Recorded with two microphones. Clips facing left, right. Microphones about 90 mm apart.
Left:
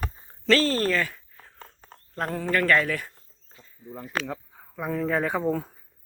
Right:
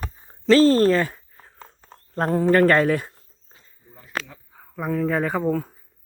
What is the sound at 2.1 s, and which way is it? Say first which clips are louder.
Speech: right 8 dB; 35° right (ahead or behind).